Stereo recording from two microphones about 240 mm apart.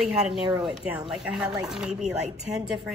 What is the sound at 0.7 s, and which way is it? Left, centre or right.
Speech, centre.